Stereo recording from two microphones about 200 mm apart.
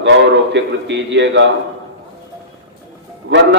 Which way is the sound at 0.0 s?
60° right (ahead or behind).